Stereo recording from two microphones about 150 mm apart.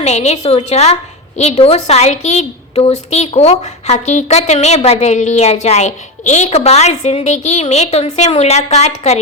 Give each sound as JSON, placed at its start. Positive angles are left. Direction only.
{"t": 0.0, "sound": "a woman's voice", "side_deg": 50}